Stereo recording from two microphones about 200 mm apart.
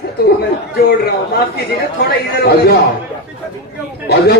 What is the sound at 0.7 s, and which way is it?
A man's voice, 50° left (ahead or behind).